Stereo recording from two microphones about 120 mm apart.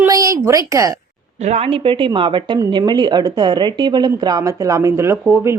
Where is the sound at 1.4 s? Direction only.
60° right (ahead or behind).